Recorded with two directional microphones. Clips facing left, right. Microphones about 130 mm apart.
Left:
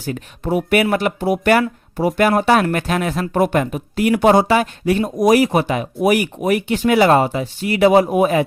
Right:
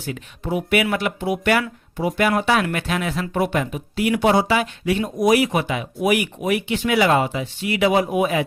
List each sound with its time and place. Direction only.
0.0 s speech: 40° left (ahead or behind)